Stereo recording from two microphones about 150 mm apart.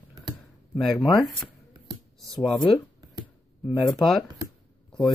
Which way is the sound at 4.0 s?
Centre (ahead or behind).